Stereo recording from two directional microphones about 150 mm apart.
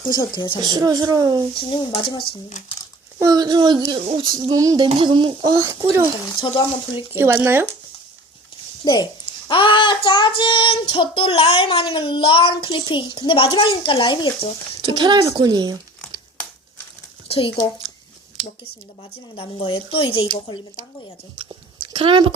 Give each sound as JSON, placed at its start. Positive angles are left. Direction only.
{"t": 0.1, "sound": "a woman's voice", "side_deg": 30}
{"t": 0.6, "sound": "speech", "side_deg": -25}
{"t": 1.5, "sound": "child singing", "side_deg": 35}
{"t": 3.2, "sound": "speech", "side_deg": -25}
{"t": 7.2, "sound": "speech", "side_deg": -15}
{"t": 8.8, "sound": "speech", "side_deg": 25}
{"t": 9.5, "sound": "child singing", "side_deg": 35}
{"t": 14.8, "sound": "speech", "side_deg": -30}
{"t": 17.2, "sound": "speech", "side_deg": 40}
{"t": 19.4, "sound": "child singing", "side_deg": 35}
{"t": 21.3, "sound": "speech", "side_deg": -30}